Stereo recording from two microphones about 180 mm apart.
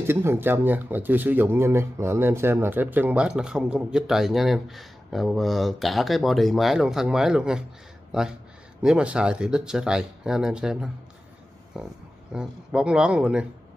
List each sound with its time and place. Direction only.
0.0 s speech: 15° right (ahead or behind)